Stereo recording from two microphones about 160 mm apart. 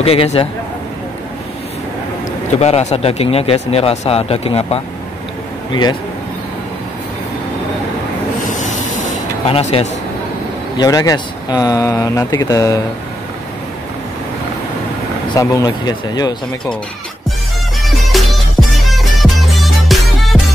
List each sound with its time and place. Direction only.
0.0 s speech: 40° left (ahead or behind)
2.4 s speech: 45° left (ahead or behind)
5.7 s speech: 25° left (ahead or behind)
8.5 s train: 50° left (ahead or behind)
9.5 s speech: 40° left (ahead or behind)
10.8 s speech: 25° left (ahead or behind)
15.3 s speech: 25° left (ahead or behind)
17.8 s music: centre (ahead or behind)